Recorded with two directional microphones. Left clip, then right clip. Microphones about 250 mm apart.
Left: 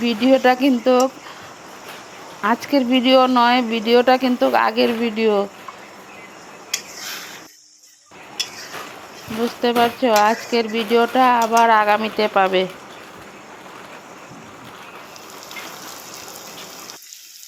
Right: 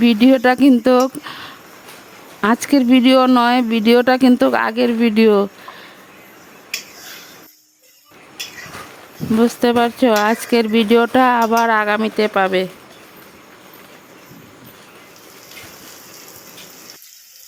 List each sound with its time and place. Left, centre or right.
0.0 s speech: right
2.6 s speech: right
9.6 s speech: right